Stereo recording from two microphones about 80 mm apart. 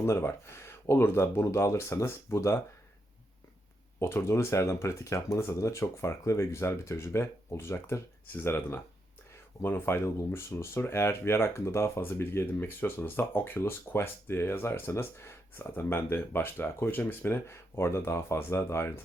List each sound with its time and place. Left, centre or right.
0.0 s speech: left
4.0 s speech: left